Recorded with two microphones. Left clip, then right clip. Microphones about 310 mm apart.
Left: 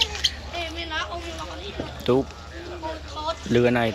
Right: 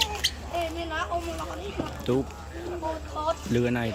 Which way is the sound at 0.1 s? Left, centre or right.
Right.